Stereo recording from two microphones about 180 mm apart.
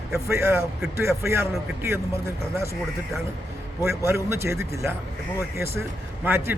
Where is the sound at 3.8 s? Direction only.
15° right (ahead or behind).